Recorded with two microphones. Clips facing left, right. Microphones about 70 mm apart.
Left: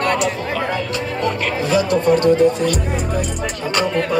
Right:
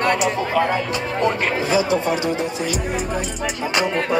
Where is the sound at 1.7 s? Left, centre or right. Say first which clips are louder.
Left 5 dB; centre.